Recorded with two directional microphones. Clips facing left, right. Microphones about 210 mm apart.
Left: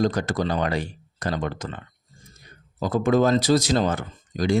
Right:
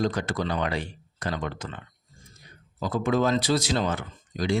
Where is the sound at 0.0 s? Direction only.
40° left (ahead or behind).